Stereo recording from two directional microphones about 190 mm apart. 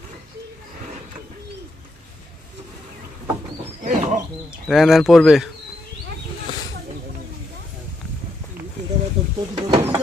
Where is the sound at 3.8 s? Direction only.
40° right (ahead or behind).